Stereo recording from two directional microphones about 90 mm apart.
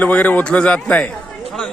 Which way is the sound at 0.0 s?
15° left (ahead or behind).